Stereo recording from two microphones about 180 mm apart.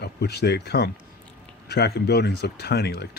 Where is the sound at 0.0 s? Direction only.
65° left (ahead or behind).